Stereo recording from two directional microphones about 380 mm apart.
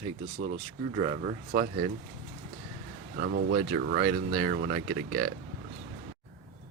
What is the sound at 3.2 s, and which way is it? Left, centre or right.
Speech, right.